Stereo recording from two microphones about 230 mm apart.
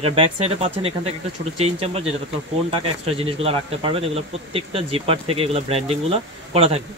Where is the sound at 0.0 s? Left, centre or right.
Right.